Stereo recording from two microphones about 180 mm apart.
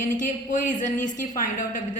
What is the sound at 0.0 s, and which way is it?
A woman's voice, 45° left (ahead or behind).